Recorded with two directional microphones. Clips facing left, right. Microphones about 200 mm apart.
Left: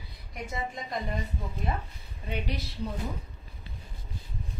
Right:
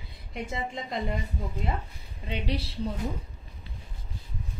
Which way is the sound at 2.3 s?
30° right (ahead or behind).